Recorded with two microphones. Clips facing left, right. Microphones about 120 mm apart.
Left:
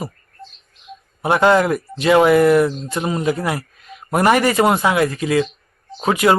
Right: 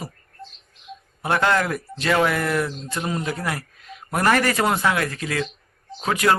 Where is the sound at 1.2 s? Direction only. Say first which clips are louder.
Left 6 dB; 15° left (ahead or behind).